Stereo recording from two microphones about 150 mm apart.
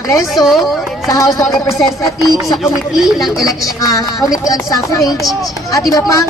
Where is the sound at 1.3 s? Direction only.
20° left (ahead or behind).